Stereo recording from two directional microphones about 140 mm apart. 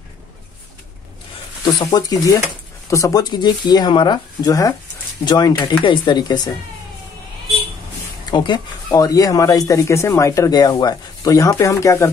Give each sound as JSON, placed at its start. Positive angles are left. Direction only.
{"t": 1.6, "sound": "speech", "side_deg": 30}
{"t": 8.3, "sound": "speech", "side_deg": 30}